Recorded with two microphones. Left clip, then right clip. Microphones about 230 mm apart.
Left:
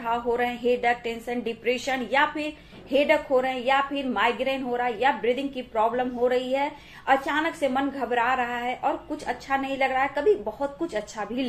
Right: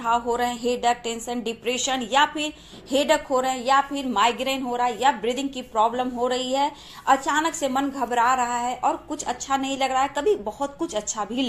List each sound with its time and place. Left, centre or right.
0.1 s a woman's voice: right